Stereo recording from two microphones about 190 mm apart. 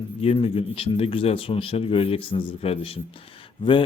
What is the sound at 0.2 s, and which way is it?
A man's voice, 30° left (ahead or behind).